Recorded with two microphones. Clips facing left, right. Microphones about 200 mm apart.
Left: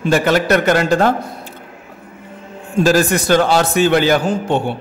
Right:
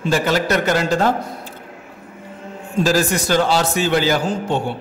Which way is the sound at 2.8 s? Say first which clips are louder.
Left 4 dB; 55° left (ahead or behind).